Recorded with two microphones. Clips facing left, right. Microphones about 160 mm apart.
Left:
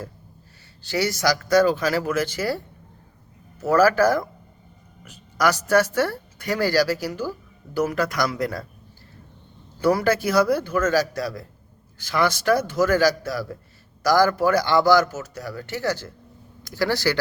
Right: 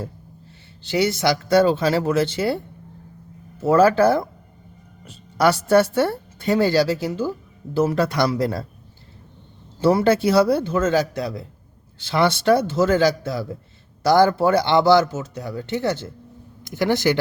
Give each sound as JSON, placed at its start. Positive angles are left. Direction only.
{"t": 0.9, "sound": "a woman's voice", "side_deg": -25}
{"t": 3.6, "sound": "a woman's voice", "side_deg": -25}
{"t": 9.8, "sound": "a woman's voice", "side_deg": -25}